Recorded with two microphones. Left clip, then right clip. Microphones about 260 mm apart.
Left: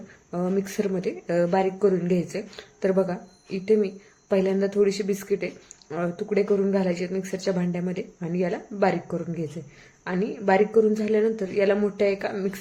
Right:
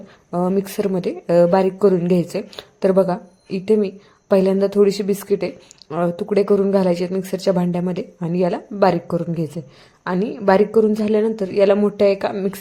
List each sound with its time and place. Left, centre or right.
0.3 s speech: centre